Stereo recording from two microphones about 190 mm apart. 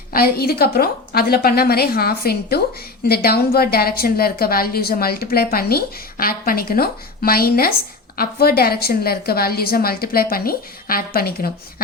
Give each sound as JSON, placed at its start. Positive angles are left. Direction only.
{"t": 0.1, "sound": "a woman's voice", "side_deg": 50}